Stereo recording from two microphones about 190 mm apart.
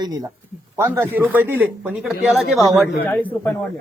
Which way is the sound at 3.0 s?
10° left (ahead or behind).